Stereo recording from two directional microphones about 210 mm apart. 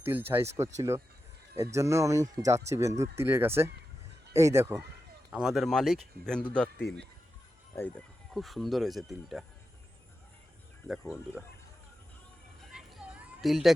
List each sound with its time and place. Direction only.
0.0 s speech: 10° right (ahead or behind); by 6.7 s 5° left (ahead or behind)
7.8 s speech: 5° left (ahead or behind)
10.8 s speech: 10° left (ahead or behind)
12.7 s children playing: centre (ahead or behind)